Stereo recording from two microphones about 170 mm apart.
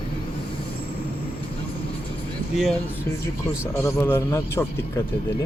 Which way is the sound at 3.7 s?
15° left (ahead or behind).